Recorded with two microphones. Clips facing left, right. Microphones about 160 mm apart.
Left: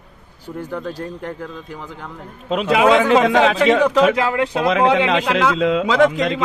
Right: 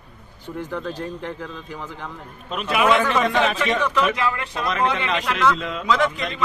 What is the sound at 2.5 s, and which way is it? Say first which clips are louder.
A man's voice: left 5 dB; 90° left.